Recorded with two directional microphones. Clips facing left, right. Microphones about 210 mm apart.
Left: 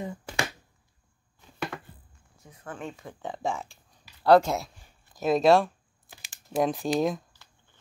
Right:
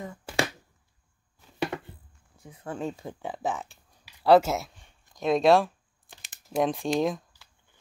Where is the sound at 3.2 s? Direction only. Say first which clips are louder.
Left 3 dB; 5° right (ahead or behind).